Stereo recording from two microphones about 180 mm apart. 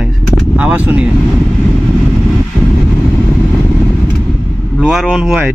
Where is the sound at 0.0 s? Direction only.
5° right (ahead or behind).